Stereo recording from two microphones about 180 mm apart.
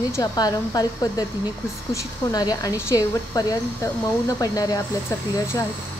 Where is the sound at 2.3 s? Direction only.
20° left (ahead or behind).